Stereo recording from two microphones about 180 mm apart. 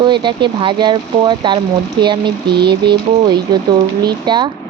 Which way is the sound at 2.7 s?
25° right (ahead or behind).